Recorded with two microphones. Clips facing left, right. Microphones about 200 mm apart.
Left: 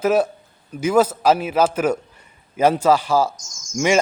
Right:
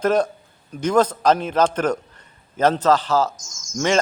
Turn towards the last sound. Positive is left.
turn(degrees=10)  # may be behind; listen again after turning